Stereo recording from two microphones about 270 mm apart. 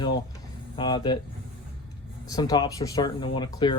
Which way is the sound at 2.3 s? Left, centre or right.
Centre.